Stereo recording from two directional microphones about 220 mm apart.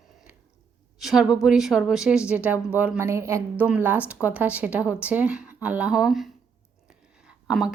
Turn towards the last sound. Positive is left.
turn(degrees=-5)  # may be behind; listen again after turning